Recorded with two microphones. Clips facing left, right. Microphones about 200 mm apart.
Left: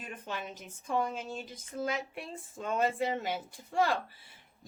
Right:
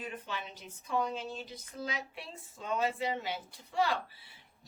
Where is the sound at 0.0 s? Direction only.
45° left (ahead or behind).